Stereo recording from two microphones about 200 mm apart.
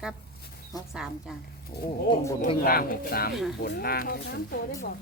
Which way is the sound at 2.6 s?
45° left (ahead or behind).